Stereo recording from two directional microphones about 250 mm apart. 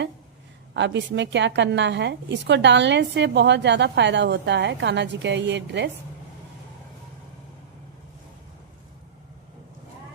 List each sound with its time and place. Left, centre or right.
0.7 s a woman's voice: right